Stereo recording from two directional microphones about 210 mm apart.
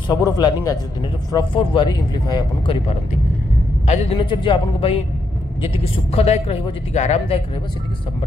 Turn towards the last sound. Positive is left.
turn(degrees=35)  # may be behind; listen again after turning